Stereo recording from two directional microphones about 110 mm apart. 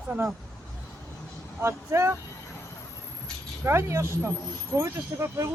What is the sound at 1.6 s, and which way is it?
Speech, 25° right (ahead or behind).